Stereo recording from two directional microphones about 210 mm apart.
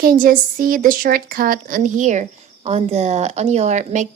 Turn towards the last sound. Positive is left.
turn(degrees=-35)  # may be behind; listen again after turning